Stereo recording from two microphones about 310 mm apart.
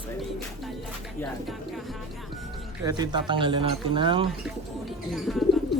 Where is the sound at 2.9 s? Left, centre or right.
Centre.